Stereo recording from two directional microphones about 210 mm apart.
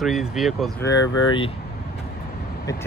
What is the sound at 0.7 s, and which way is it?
Speech, 15° left (ahead or behind).